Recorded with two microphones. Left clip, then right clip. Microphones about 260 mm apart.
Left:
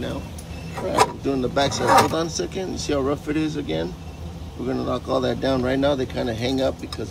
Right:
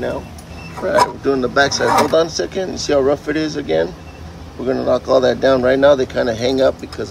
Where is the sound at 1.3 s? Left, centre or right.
Right.